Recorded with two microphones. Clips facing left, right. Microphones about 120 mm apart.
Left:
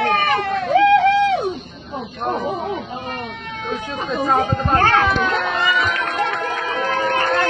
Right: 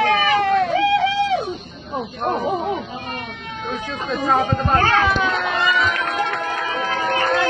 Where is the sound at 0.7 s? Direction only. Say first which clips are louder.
Left 5 dB; 60° left (ahead or behind).